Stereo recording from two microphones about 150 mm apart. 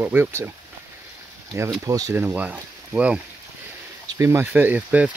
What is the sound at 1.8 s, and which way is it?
Speech, 20° right (ahead or behind).